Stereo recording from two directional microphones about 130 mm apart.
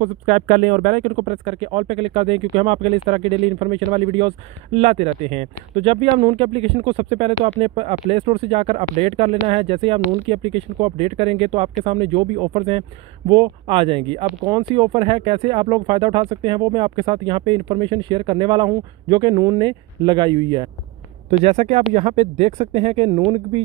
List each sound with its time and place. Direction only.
0.0 s speech: 60° right (ahead or behind); by 1.1 s 90° right
1.1 s speech: 50° right (ahead or behind); by 20.6 s 35° right (ahead or behind)
21.3 s speech: 55° right (ahead or behind)